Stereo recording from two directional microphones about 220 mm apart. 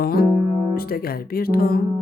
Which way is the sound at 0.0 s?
45° left (ahead or behind).